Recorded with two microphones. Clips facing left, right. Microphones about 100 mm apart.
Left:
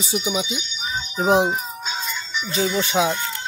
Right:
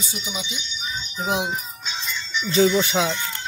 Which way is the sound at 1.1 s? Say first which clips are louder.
Left 7 dB; 45° left (ahead or behind).